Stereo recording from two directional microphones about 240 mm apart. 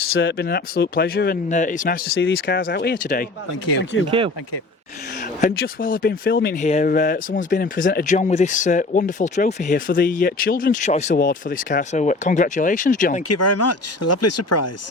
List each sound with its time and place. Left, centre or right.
0.1 s speech: left
2.1 s speech: left
3.9 s speech: left
5.2 s speech: left
13.2 s speech: left